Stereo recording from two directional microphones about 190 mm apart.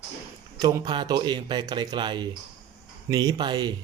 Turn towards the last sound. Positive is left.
turn(degrees=-20)  # may be behind; listen again after turning